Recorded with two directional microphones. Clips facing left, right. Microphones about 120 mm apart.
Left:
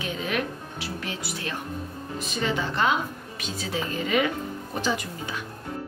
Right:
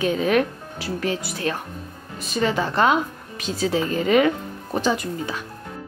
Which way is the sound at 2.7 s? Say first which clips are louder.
Right 5 dB; 45° right (ahead or behind).